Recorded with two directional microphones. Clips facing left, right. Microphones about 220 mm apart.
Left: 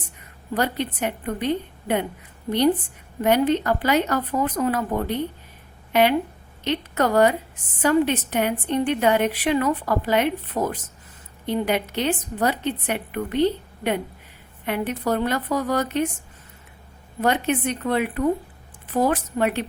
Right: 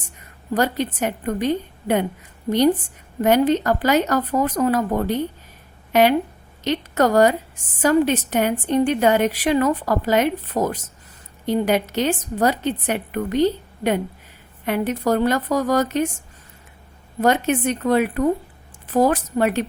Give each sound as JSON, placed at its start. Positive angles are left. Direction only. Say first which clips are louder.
{"t": 0.5, "sound": "a woman's voice", "louder": "right 3 dB", "side_deg": -45}
{"t": 3.2, "sound": "a woman's voice", "louder": "right 2 dB", "side_deg": -45}
{"t": 17.2, "sound": "a woman's voice", "louder": "right 3 dB", "side_deg": -45}